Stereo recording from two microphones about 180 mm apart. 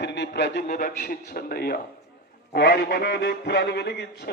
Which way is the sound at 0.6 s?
45° left (ahead or behind).